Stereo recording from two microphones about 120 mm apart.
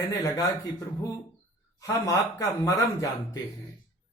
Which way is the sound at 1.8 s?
30° left (ahead or behind).